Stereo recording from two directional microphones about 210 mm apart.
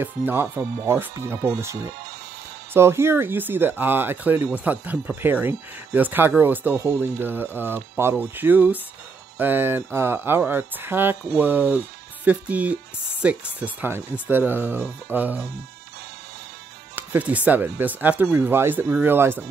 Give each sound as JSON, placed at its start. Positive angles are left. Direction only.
{"t": 0.0, "sound": "speech", "side_deg": -10}
{"t": 16.9, "sound": "speech", "side_deg": -10}